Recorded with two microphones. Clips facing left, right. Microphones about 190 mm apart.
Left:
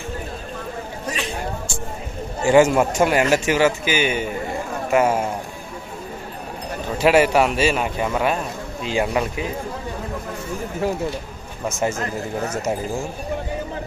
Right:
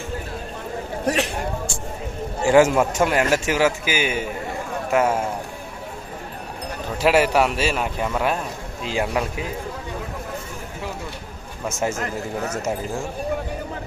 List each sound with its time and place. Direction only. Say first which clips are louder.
1.0 s a sound: right 7 dB; 70° right (ahead or behind)
2.5 s a man's voice: left 1 dB; 5° right (ahead or behind)
7.0 s a man's voice: left 2 dB; centre (ahead or behind)
11.8 s a man's voice: left 1 dB; 5° right (ahead or behind)